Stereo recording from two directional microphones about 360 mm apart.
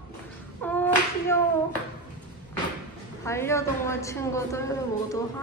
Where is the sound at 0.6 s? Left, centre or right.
Centre.